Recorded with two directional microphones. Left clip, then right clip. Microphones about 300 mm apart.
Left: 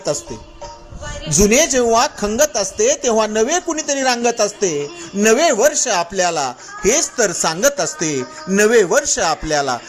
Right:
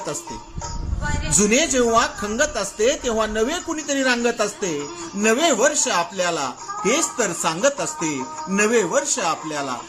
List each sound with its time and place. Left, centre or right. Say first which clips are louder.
1.5 s speech: left 5 dB; centre